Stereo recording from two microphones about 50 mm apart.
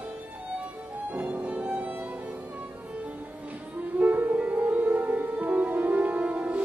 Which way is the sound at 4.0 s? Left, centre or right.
Right.